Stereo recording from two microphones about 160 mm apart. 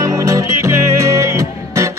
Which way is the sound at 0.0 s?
20° right (ahead or behind).